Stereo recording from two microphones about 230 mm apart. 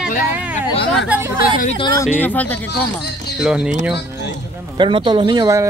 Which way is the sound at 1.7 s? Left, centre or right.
Centre.